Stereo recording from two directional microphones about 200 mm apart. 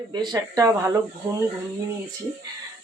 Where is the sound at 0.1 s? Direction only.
20° right (ahead or behind).